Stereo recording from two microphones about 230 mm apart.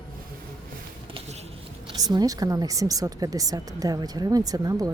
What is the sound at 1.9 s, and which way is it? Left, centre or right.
Speech, centre.